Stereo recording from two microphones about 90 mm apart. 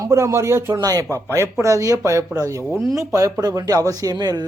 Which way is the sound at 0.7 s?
45° right (ahead or behind).